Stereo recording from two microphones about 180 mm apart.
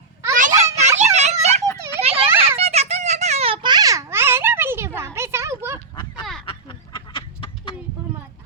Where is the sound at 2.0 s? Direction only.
35° right (ahead or behind).